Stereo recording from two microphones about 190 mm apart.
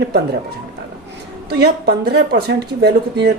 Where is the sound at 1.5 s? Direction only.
60° right (ahead or behind).